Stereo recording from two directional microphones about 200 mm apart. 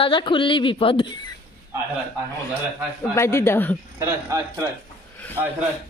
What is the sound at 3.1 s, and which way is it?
Speech, 15° left (ahead or behind).